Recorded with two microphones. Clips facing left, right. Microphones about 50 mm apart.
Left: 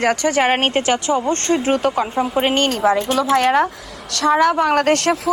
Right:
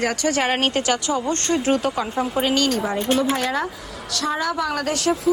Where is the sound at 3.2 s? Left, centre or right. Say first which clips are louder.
Left 5 dB; left.